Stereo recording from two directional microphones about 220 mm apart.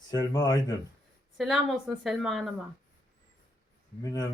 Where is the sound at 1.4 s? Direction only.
Centre (ahead or behind).